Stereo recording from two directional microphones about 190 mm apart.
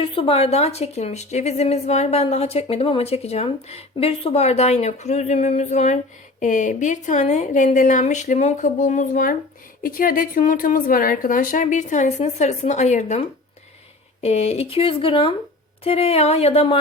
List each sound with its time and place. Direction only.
0.0 s a woman's voice: 30° left (ahead or behind)